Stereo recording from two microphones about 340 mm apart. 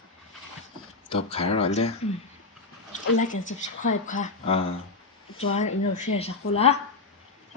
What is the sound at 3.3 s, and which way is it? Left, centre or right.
Speech, left.